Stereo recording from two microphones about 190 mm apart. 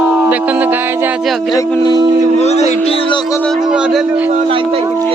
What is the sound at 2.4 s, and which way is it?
Music, 35° left (ahead or behind).